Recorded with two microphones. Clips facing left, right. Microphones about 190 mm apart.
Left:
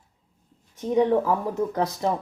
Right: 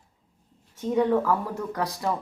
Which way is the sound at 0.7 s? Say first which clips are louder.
Left 2 dB; 20° left (ahead or behind).